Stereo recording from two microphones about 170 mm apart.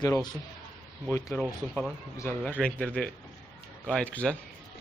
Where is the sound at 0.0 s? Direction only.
25° left (ahead or behind).